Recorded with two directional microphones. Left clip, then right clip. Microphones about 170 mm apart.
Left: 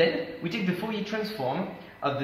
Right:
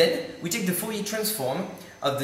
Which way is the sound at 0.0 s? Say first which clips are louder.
Right 2 dB; 15° right (ahead or behind).